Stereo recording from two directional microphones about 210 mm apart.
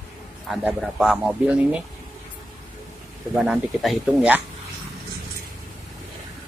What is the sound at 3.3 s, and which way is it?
Speech, 5° right (ahead or behind).